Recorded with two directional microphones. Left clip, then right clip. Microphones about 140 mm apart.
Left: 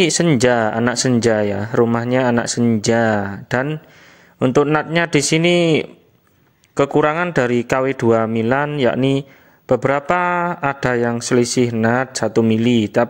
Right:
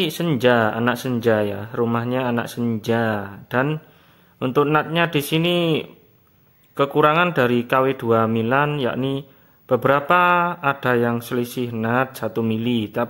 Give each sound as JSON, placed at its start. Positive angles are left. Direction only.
{"t": 0.0, "sound": "a man's voice", "side_deg": 35}